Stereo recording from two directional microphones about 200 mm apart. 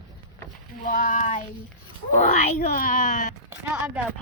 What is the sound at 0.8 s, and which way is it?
A child's voice, 40° left (ahead or behind).